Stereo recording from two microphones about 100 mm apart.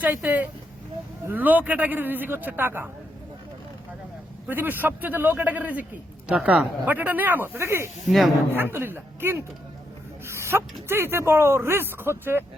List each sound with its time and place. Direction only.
0.0 s a man's voice: 15° right (ahead or behind)
4.4 s a man's voice: 20° right (ahead or behind)
10.2 s a sound: 25° right (ahead or behind)
10.8 s a man's voice: 25° right (ahead or behind)